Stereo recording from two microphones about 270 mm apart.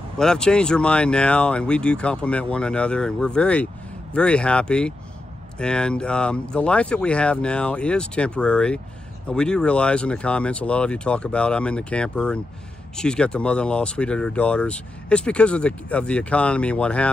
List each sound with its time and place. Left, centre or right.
0.2 s speech: centre